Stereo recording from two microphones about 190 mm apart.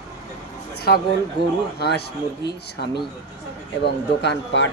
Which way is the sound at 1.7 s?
60° left (ahead or behind).